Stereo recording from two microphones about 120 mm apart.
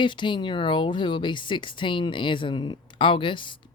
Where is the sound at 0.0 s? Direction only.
40° left (ahead or behind).